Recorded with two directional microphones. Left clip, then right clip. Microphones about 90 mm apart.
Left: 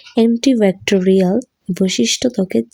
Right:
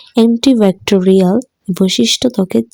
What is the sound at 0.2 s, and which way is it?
Speech, 40° right (ahead or behind).